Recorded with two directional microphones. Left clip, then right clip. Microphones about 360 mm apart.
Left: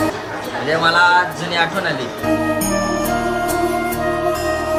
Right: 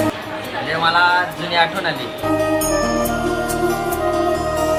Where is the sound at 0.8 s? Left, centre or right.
Centre.